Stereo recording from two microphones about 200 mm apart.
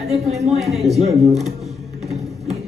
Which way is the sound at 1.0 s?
30° right (ahead or behind).